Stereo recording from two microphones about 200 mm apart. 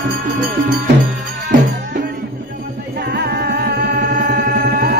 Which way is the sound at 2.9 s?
55° right (ahead or behind).